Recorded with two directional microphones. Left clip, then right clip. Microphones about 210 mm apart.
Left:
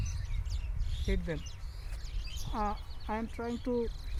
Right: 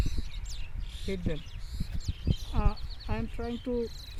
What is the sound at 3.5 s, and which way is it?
Speech, 30° right (ahead or behind).